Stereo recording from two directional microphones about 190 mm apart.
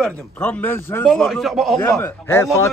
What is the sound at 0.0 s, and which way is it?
Speech, 5° left (ahead or behind).